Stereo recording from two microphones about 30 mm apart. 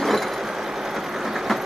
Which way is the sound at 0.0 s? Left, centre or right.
Centre.